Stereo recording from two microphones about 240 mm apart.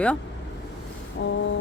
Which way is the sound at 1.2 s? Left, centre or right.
Left.